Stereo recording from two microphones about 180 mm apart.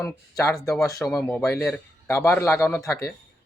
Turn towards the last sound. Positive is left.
turn(degrees=15)  # may be behind; listen again after turning